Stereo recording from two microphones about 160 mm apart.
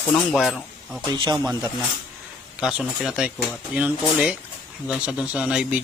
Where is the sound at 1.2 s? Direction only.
25° right (ahead or behind).